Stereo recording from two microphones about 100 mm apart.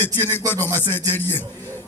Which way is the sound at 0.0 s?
20° left (ahead or behind).